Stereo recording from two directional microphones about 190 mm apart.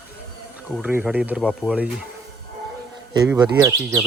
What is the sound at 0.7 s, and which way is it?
Speech, 10° right (ahead or behind).